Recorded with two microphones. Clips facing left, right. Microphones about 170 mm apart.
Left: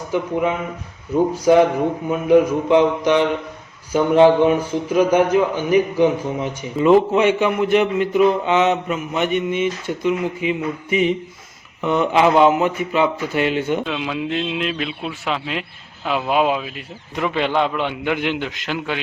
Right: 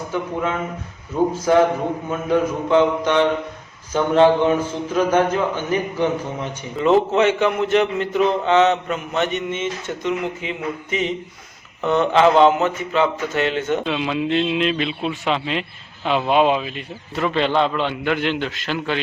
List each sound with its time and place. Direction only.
1.3 s a man's voice: 15° left (ahead or behind)
13.8 s a man's voice: centre (ahead or behind); by 18.9 s 15° left (ahead or behind)